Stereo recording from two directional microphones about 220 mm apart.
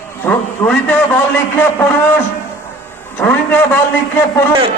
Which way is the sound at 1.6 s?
10° left (ahead or behind).